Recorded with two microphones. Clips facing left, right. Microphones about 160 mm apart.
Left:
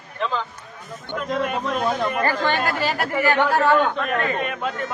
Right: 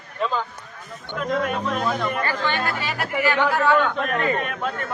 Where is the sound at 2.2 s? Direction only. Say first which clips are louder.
Left 3 dB; 40° left (ahead or behind).